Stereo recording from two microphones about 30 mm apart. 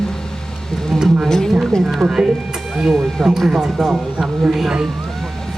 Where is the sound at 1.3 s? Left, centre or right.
Centre.